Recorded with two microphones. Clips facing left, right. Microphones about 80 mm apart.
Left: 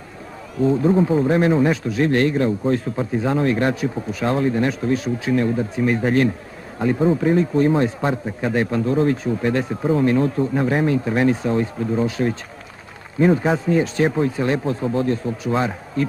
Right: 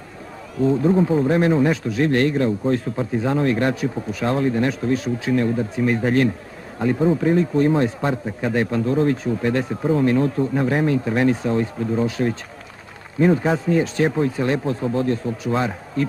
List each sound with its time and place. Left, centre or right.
0.7 s speech: centre